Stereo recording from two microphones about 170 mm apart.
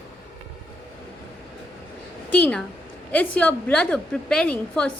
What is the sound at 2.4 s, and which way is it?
A woman's voice, 5° left (ahead or behind).